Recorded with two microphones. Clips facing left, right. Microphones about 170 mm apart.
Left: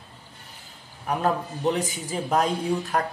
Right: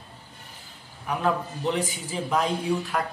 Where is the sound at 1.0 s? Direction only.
40° left (ahead or behind).